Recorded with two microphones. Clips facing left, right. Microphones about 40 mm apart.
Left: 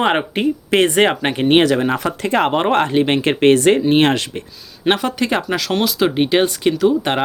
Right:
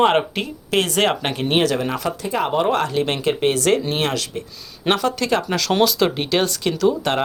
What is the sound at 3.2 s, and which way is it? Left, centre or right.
Speech, left.